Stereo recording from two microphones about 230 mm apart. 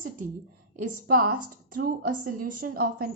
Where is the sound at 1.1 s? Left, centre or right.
Right.